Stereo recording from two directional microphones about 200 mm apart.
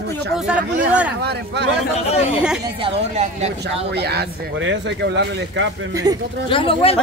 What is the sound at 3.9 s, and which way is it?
Speech, 55° right (ahead or behind).